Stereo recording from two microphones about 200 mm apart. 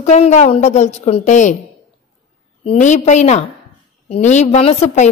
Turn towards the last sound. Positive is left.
turn(degrees=30)  # may be behind; listen again after turning